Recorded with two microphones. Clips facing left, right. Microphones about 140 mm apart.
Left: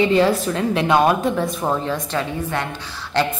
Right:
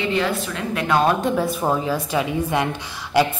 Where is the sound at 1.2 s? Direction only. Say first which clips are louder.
Even; centre (ahead or behind).